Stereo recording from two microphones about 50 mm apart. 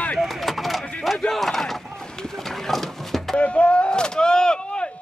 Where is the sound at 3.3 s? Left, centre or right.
Left.